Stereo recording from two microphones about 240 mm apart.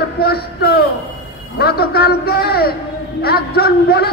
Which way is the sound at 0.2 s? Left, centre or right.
Left.